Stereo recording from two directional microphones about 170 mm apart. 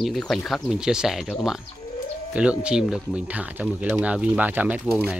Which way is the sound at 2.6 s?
5° right (ahead or behind).